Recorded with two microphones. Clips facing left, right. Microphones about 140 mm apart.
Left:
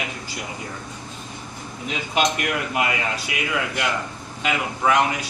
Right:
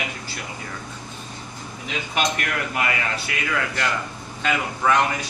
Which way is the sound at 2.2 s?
20° left (ahead or behind).